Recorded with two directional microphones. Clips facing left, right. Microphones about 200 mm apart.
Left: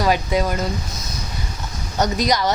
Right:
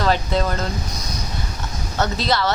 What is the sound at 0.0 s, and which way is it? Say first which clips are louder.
Speech: left 1 dB; 10° left (ahead or behind).